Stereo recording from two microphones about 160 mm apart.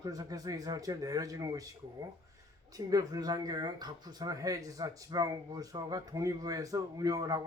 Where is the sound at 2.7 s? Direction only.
20° right (ahead or behind).